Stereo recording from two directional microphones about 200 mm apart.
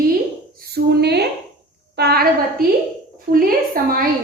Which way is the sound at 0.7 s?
55° right (ahead or behind).